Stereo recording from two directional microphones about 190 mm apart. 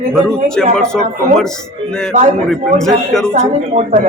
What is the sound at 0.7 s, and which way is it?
Speech, 5° left (ahead or behind).